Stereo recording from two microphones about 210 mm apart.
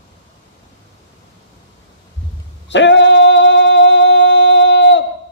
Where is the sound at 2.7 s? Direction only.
60° left (ahead or behind).